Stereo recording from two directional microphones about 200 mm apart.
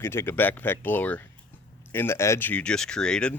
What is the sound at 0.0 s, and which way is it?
Speech, 10° left (ahead or behind).